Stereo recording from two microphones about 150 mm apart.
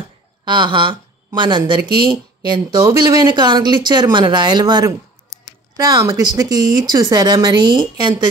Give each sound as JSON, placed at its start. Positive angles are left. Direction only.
{"t": 0.5, "sound": "speech", "side_deg": -30}